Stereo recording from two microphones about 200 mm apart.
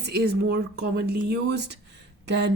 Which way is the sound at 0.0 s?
55° right (ahead or behind).